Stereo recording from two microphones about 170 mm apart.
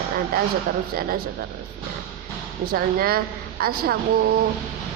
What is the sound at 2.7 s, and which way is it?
Speech, 60° right (ahead or behind).